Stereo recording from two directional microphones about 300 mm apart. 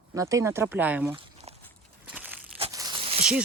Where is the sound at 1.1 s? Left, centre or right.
Right.